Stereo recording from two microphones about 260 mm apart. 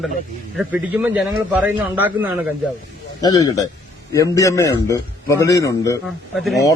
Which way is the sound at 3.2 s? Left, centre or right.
Centre.